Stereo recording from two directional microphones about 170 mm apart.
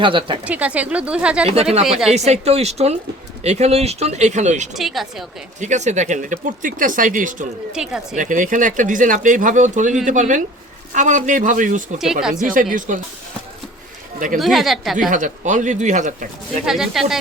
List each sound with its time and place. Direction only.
0.0 s speech: 30° right (ahead or behind)
0.4 s speech: 10° right (ahead or behind)
2.1 s speech: 40° right (ahead or behind)
4.7 s speech: centre (ahead or behind)
5.5 s speech: 45° right (ahead or behind)
7.7 s speech: 5° right (ahead or behind)
8.1 s speech: 50° right (ahead or behind)
12.2 s speech: 5° right (ahead or behind)
12.9 s speech: 50° right (ahead or behind)
14.3 s speech: centre (ahead or behind)
15.1 s speech: 50° right (ahead or behind)
16.6 s speech: 5° right (ahead or behind)